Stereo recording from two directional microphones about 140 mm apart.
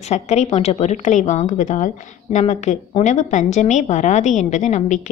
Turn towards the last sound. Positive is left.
turn(degrees=55)  # may be behind; listen again after turning